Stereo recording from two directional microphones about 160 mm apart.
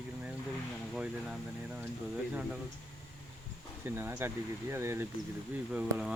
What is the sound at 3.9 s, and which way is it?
Speech, 15° right (ahead or behind).